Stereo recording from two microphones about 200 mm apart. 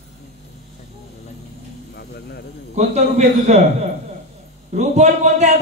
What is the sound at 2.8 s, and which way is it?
Speech, 35° right (ahead or behind).